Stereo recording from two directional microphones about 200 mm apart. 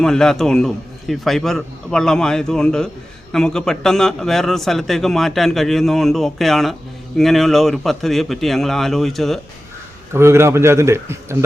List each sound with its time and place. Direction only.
0.0 s a man's voice: centre (ahead or behind)
10.1 s a man's voice: 15° right (ahead or behind)